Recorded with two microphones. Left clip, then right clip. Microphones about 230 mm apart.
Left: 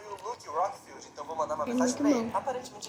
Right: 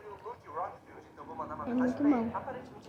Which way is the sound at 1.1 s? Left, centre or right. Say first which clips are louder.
Left 9 dB; left.